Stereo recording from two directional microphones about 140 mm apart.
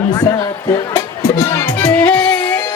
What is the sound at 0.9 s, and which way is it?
Music, 30° left (ahead or behind).